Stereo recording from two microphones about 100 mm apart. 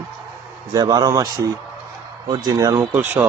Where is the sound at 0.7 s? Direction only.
45° right (ahead or behind).